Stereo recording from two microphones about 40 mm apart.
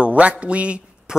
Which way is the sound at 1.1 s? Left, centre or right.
Centre.